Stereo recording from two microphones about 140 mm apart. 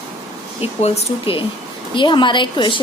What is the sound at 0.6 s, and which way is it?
A woman's voice, 45° left (ahead or behind).